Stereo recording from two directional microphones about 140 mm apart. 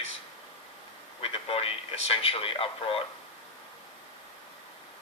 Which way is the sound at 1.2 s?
45° left (ahead or behind).